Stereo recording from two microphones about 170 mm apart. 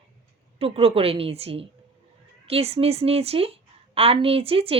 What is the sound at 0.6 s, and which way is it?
Speech, 35° right (ahead or behind).